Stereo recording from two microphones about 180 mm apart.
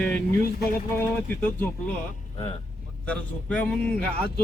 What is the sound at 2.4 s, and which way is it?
Speech, 35° left (ahead or behind).